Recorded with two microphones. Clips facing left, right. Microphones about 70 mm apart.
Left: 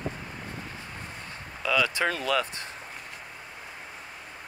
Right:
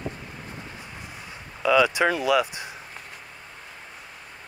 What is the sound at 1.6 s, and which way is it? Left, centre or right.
Speech, centre.